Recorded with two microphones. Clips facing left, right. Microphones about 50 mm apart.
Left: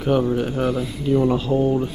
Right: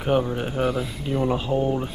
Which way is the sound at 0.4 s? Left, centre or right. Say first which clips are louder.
Left 2 dB; centre.